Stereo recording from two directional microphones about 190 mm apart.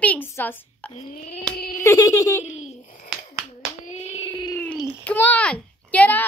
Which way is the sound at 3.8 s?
35° left (ahead or behind).